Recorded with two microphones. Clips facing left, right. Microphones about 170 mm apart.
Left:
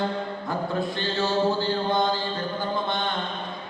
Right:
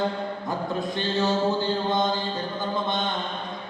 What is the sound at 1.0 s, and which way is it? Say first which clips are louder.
Mantra: right 1 dB; 20° right (ahead or behind).